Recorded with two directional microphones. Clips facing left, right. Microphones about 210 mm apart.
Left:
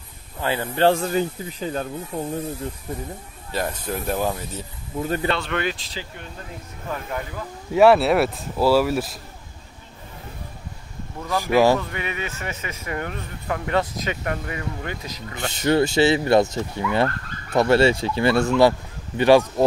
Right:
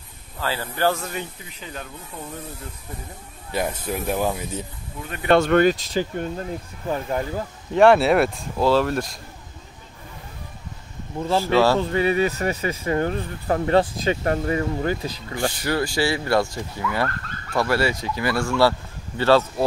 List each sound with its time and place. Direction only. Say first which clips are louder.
0.4 s speech: left 4 dB; 20° left (ahead or behind); by 2.2 s 35° left (ahead or behind)
3.5 s speech: right 1 dB; 15° right (ahead or behind)
5.0 s speech: left 9 dB; 30° left (ahead or behind)
5.3 s speech: right 9 dB; 45° right (ahead or behind)
6.9 s speech: right 5 dB; 35° right (ahead or behind)
7.7 s speech: even; 5° left (ahead or behind)
11.1 s speech: right 4 dB; 30° right (ahead or behind)
11.4 s speech: left 2 dB; 15° left (ahead or behind)
11.8 s speech: right 10 dB; 35° right (ahead or behind)
15.5 s speech: left 11 dB; 25° left (ahead or behind)